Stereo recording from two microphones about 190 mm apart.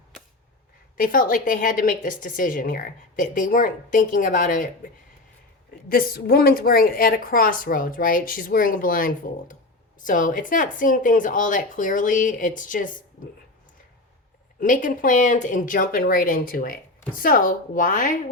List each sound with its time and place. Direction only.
0.9 s a woman's voice: 45° left (ahead or behind)
5.9 s a woman's voice: 50° left (ahead or behind)
14.6 s a woman's voice: 45° left (ahead or behind)